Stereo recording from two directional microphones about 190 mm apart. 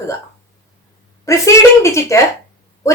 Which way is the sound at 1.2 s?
15° left (ahead or behind).